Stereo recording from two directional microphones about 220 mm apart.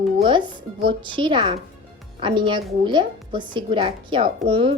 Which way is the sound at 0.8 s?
20° right (ahead or behind).